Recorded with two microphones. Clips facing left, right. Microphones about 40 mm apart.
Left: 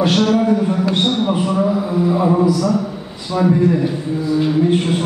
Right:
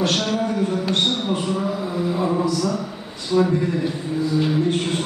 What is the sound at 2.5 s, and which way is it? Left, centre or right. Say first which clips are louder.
Speech: left 5 dB; centre.